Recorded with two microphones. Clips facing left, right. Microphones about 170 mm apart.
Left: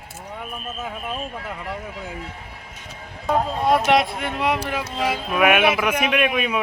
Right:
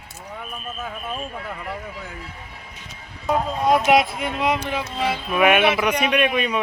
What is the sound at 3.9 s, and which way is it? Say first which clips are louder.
A man's voice: right 1 dB; centre (ahead or behind).